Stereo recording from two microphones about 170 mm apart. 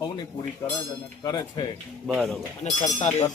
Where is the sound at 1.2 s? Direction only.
25° left (ahead or behind).